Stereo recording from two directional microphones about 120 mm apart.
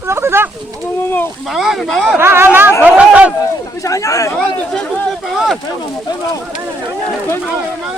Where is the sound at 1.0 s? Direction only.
20° left (ahead or behind).